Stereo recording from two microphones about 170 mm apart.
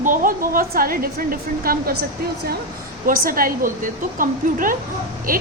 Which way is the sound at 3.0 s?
55° right (ahead or behind).